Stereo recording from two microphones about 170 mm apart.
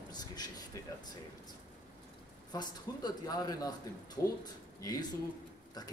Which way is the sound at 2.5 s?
20° left (ahead or behind).